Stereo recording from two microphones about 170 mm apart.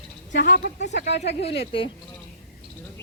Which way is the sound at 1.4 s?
30° left (ahead or behind).